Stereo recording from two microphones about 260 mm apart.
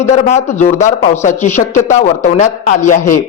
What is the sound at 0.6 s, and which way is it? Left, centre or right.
A man's voice, left.